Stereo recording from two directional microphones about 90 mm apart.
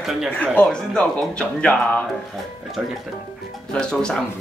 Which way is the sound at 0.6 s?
10° left (ahead or behind).